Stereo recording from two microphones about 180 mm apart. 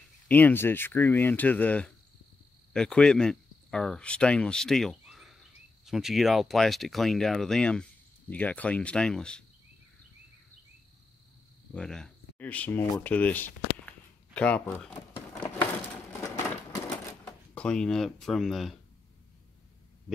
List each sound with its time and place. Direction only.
0.3 s speech: 10° left (ahead or behind)
11.7 s speech: 5° left (ahead or behind)
16.2 s typewriter: 20° left (ahead or behind)
17.2 s speech: 5° left (ahead or behind)